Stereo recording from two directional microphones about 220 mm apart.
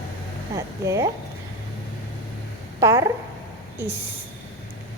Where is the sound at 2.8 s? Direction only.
15° right (ahead or behind).